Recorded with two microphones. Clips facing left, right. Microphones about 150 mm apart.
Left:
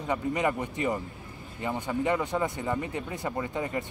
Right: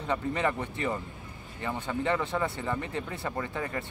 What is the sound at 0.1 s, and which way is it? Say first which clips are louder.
Speech: left 1 dB; 15° left (ahead or behind).